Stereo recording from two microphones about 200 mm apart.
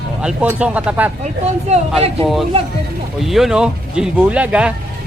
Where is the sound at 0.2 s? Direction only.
5° right (ahead or behind).